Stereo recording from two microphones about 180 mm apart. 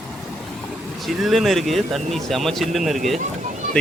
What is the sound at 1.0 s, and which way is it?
Speech, centre (ahead or behind).